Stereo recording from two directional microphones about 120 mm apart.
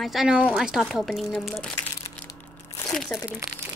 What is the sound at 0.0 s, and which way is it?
Speech, centre (ahead or behind).